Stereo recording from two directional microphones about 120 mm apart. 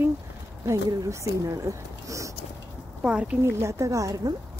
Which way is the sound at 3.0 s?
10° right (ahead or behind).